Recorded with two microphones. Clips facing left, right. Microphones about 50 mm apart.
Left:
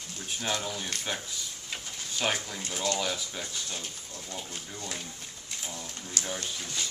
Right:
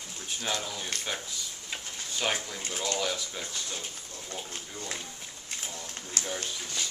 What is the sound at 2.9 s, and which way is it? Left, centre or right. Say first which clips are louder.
Speech: even; centre.